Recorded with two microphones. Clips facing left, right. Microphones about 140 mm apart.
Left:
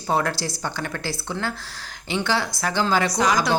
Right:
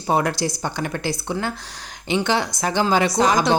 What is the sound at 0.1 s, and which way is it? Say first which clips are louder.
A woman's voice: right 3 dB; 15° right (ahead or behind).